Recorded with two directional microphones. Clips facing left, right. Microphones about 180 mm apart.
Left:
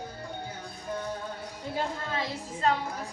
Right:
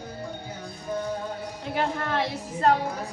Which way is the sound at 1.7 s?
70° right (ahead or behind).